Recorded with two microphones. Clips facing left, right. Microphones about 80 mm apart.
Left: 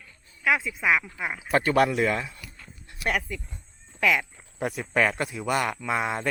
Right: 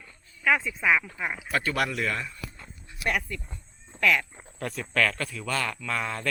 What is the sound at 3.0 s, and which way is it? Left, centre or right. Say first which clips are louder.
A man's voice: left 1 dB; centre.